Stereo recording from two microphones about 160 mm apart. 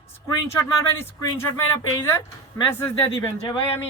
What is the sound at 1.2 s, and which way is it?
Speech, 20° left (ahead or behind).